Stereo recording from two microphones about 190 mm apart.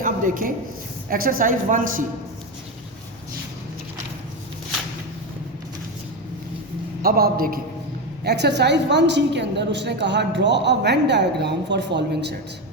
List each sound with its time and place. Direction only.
0.0 s a sound: 45° right (ahead or behind)
1.1 s a woman's voice: 50° right (ahead or behind)
7.0 s a woman's voice: 50° right (ahead or behind)
8.2 s a woman's voice: 60° right (ahead or behind)